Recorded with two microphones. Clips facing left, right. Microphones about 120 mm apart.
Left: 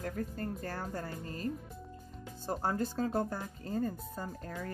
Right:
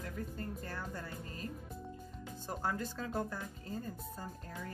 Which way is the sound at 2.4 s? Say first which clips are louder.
Left 5 dB; 35° left (ahead or behind).